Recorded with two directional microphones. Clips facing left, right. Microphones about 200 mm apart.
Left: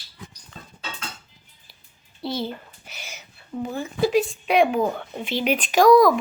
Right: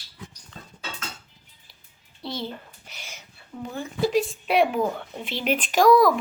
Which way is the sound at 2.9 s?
5° left (ahead or behind).